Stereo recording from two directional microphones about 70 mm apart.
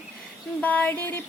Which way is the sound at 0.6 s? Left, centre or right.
Left.